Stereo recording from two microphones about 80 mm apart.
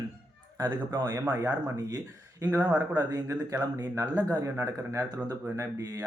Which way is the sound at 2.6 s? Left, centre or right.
Centre.